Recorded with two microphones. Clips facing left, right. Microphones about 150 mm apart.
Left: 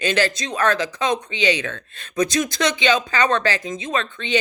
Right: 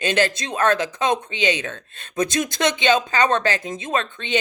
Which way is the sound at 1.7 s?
20° right (ahead or behind).